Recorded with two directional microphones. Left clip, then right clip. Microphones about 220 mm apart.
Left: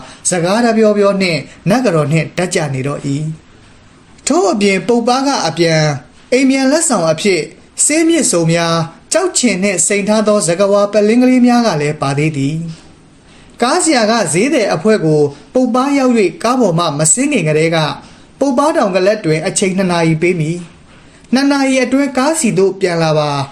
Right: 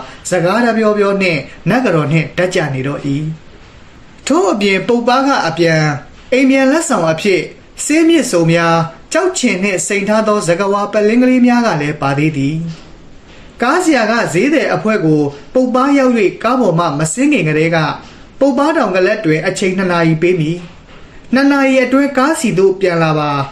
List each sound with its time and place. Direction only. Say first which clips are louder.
0.3 s speech: even; 30° left (ahead or behind)
4.6 s speech: even; 25° left (ahead or behind)
13.6 s speech: even; 30° left (ahead or behind)